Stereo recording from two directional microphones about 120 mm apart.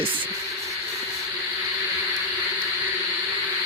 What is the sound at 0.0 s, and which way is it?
Music, 15° right (ahead or behind).